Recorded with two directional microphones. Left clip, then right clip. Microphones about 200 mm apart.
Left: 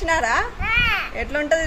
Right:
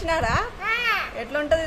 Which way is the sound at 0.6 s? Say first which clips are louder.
Left 3 dB; 30° right (ahead or behind).